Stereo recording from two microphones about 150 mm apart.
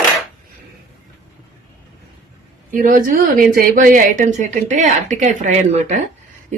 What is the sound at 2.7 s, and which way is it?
Speech, 65° right (ahead or behind).